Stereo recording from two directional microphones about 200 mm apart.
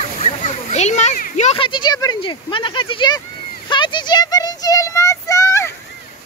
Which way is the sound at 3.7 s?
25° left (ahead or behind).